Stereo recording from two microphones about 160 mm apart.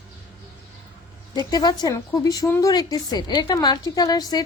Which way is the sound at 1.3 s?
25° left (ahead or behind).